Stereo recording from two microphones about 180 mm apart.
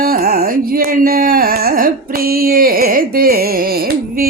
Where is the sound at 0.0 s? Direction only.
55° right (ahead or behind).